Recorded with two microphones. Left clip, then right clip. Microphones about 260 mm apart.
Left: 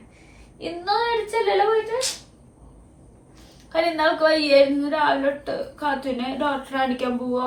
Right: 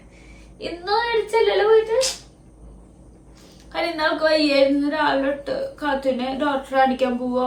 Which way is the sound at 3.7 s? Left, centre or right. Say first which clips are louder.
Left 2 dB; centre.